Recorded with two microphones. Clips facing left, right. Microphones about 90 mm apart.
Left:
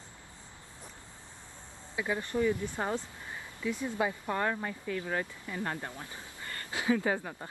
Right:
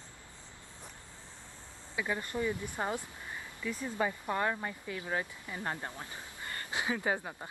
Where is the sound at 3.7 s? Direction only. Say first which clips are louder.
Left 2 dB; 5° left (ahead or behind).